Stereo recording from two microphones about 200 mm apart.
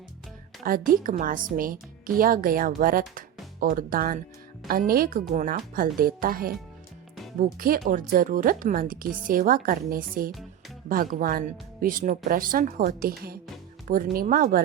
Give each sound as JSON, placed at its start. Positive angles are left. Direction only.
{"t": 0.6, "sound": "a woman's voice", "side_deg": -45}
{"t": 7.6, "sound": "a woman's voice", "side_deg": -45}